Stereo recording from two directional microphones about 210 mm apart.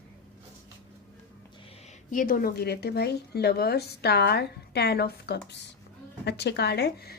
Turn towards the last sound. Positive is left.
turn(degrees=50)  # may be behind; listen again after turning